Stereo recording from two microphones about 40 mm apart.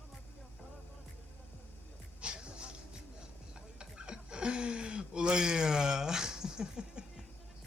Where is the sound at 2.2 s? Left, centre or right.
Right.